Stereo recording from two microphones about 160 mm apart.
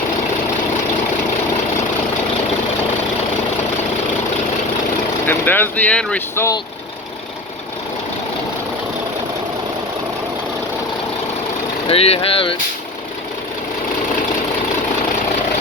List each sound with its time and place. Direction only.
5.2 s speech: 10° left (ahead or behind)
11.9 s speech: 40° left (ahead or behind)